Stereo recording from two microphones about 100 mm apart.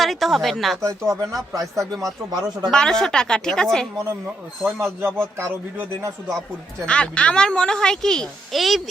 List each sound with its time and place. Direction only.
0.0 s speech: centre (ahead or behind)
0.8 s speech: 30° right (ahead or behind)
1.8 s speech: 5° left (ahead or behind)
2.0 s speech: 45° right (ahead or behind)
2.6 s a child's voice: 5° left (ahead or behind)
4.6 s speech: 25° right (ahead or behind)
6.8 s a child's voice: 10° left (ahead or behind)